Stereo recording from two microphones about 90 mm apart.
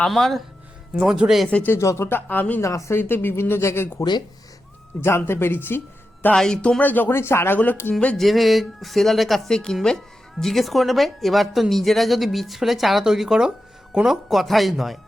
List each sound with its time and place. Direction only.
0.0 s speech: 5° left (ahead or behind)
0.9 s a man's voice: 10° right (ahead or behind)
1.5 s speech: 15° left (ahead or behind)
1.7 s speech: 30° left (ahead or behind)
2.6 s speech: 35° left (ahead or behind)
3.0 s speech: 25° left (ahead or behind)
6.3 s speech: 5° left (ahead or behind)
8.2 s speech: centre (ahead or behind)